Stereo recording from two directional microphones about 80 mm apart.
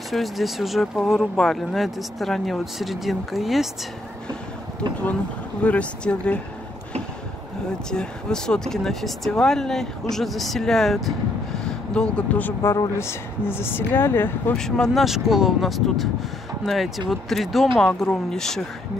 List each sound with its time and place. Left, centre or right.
0.1 s speech: centre
5.6 s a woman's voice: centre
7.9 s speech: centre
13.0 s speech: left
14.6 s a woman's voice: centre
15.0 s a woman's voice: centre